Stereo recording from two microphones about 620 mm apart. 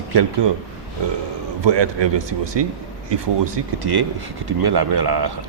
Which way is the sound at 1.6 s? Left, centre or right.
Right.